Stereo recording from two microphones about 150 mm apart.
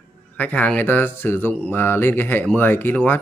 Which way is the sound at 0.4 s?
10° left (ahead or behind).